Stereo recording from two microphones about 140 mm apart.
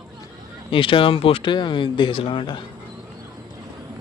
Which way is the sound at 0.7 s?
40° left (ahead or behind).